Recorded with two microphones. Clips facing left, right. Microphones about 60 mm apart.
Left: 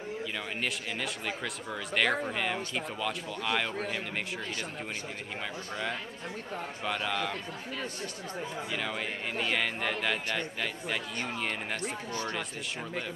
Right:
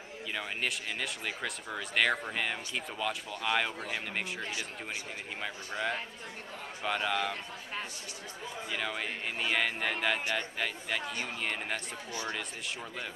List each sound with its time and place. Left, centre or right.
0.6 s speech: centre
5.4 s a man's voice: centre
8.7 s speech: centre